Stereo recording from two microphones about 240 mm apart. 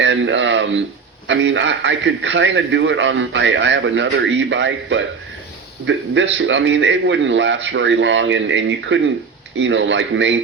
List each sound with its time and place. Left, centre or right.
0.0 s a man's voice: right